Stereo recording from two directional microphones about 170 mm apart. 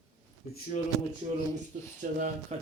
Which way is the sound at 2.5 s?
40° right (ahead or behind).